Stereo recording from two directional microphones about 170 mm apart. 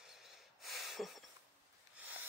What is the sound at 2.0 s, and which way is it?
Snort, 10° right (ahead or behind).